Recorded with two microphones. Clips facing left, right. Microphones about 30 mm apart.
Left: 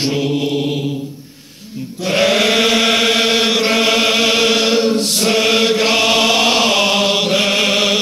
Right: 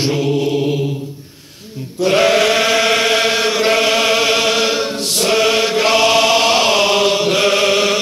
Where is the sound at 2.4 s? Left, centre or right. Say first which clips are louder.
Even; centre.